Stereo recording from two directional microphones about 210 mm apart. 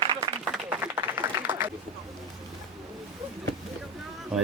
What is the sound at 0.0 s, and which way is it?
Applause, 25° right (ahead or behind).